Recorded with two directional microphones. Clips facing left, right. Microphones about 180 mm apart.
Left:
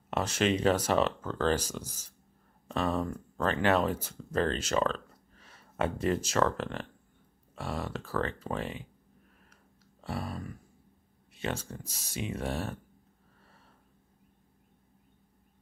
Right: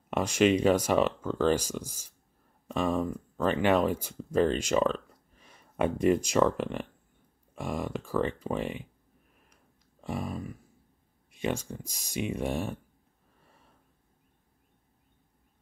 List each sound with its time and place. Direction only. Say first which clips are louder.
0.1 s speech: right 4 dB; 10° right (ahead or behind)
10.0 s speech: right 3 dB; 15° right (ahead or behind)